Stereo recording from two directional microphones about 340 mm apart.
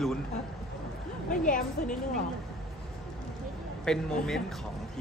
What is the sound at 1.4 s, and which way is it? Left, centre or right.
Speech, left.